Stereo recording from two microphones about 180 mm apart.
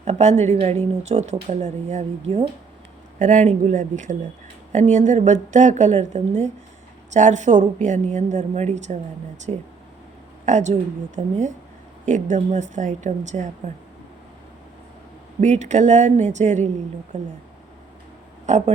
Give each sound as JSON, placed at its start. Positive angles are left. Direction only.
{"t": 0.0, "sound": "a woman's voice", "side_deg": -40}
{"t": 15.4, "sound": "a woman's voice", "side_deg": -40}
{"t": 18.4, "sound": "speech", "side_deg": -40}